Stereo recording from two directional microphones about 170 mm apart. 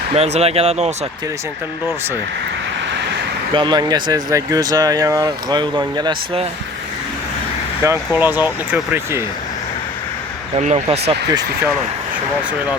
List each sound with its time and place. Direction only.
0.1 s speech: 35° right (ahead or behind)
3.5 s speech: 25° right (ahead or behind)
7.9 s speech: 10° right (ahead or behind)
10.6 s speech: 40° right (ahead or behind)